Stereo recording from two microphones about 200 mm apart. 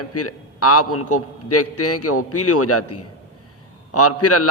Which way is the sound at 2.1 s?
90° left.